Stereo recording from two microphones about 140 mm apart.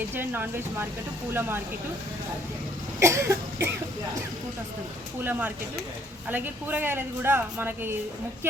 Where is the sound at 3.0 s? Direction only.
20° right (ahead or behind).